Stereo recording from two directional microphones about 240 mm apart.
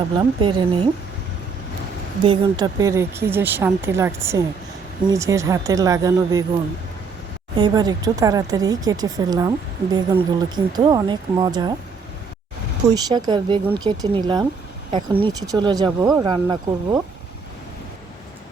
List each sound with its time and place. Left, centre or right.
0.2 s speech: centre
2.2 s speech: centre
7.5 s speech: centre
12.9 s speech: centre